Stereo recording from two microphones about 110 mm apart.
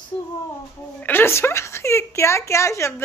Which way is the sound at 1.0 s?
20° left (ahead or behind).